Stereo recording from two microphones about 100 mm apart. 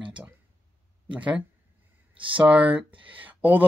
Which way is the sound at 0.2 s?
10° right (ahead or behind).